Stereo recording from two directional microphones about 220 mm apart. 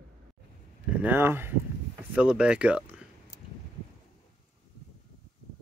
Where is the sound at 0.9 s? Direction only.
5° right (ahead or behind).